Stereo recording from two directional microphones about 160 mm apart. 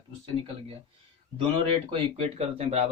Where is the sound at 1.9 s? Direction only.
35° right (ahead or behind).